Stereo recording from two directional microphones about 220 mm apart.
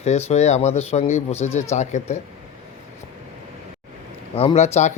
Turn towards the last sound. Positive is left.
turn(degrees=30)  # may be behind; listen again after turning